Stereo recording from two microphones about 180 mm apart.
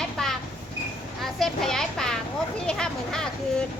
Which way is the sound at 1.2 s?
Centre (ahead or behind).